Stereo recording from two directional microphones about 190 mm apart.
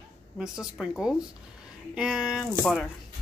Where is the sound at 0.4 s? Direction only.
5° right (ahead or behind).